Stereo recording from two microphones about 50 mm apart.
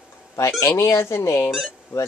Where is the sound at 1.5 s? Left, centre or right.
Centre.